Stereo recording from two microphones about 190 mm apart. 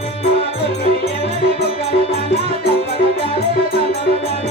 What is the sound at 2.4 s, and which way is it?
Music, 30° right (ahead or behind).